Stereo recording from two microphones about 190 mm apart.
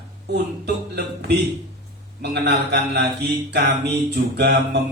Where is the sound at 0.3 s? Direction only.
55° right (ahead or behind).